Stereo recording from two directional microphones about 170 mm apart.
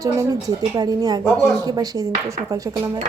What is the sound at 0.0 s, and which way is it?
Speech, 20° right (ahead or behind).